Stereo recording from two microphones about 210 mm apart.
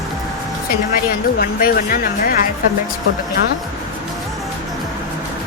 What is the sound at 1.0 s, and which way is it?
Speech, 45° left (ahead or behind).